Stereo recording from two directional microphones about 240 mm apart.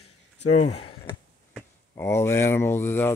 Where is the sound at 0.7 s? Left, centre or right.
Left.